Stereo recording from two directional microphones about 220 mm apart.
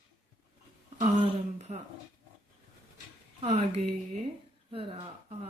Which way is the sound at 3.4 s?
25° right (ahead or behind).